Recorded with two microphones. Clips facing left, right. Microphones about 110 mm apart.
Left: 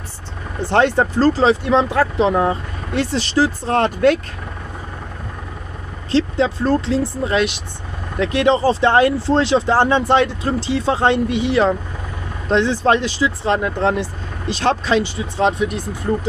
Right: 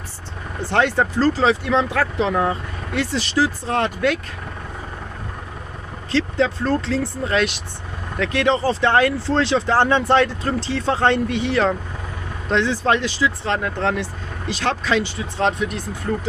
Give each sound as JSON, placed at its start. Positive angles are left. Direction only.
{"t": 0.6, "sound": "speech", "side_deg": 25}
{"t": 6.1, "sound": "speech", "side_deg": 20}
{"t": 12.4, "sound": "speech", "side_deg": 25}
{"t": 15.3, "sound": "speech", "side_deg": 10}